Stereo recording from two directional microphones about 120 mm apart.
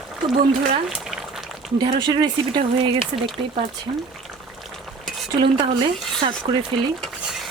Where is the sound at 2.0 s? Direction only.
35° right (ahead or behind).